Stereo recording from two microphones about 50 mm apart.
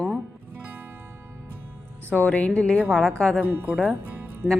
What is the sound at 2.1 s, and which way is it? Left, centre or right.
Speech, left.